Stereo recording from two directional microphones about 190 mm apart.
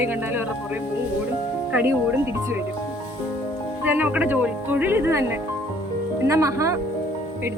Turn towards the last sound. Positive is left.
turn(degrees=-15)  # may be behind; listen again after turning